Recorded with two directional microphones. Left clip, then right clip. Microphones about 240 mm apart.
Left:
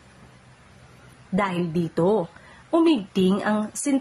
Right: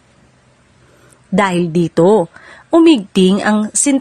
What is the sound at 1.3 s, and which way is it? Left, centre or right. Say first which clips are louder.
A woman's voice: right 11 dB; right.